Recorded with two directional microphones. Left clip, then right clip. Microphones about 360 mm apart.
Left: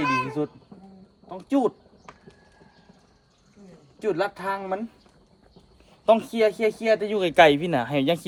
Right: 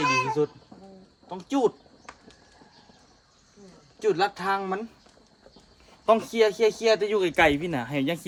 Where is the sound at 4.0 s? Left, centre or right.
Centre.